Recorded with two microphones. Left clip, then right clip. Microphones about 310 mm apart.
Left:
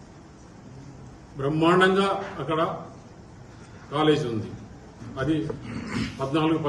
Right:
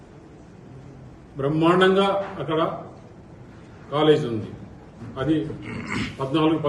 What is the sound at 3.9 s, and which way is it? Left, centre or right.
Speech, centre.